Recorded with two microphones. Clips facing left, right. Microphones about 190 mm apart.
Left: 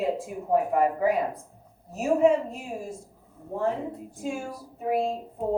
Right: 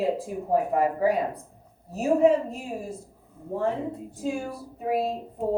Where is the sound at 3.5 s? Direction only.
30° right (ahead or behind).